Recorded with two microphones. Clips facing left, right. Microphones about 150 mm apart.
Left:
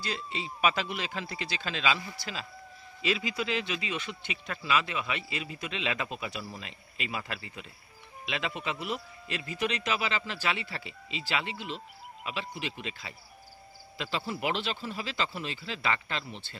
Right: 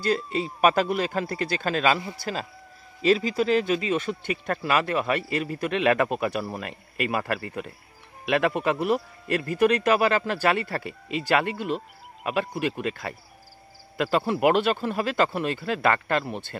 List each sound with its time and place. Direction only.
0.0 s speech: 50° right (ahead or behind)
3.0 s speech: 40° right (ahead or behind)